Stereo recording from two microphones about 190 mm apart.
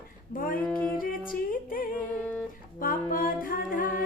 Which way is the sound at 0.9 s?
45° left (ahead or behind).